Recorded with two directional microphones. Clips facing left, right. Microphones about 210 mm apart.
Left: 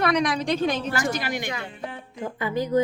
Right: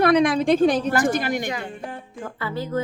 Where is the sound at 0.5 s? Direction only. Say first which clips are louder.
Right 6 dB; 50° right (ahead or behind).